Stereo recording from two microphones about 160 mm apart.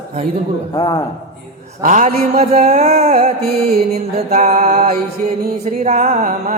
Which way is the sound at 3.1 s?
60° right (ahead or behind).